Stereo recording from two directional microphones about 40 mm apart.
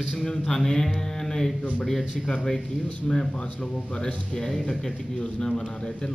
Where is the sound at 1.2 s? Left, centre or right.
Centre.